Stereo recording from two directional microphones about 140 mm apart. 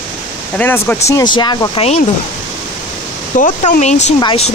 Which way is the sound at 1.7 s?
50° left (ahead or behind).